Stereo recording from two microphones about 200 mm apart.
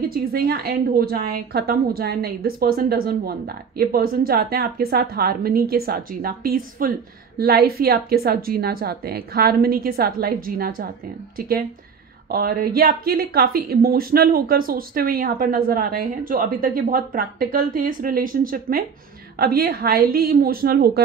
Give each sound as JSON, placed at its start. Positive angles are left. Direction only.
{"t": 0.1, "sound": "a woman's voice", "side_deg": -50}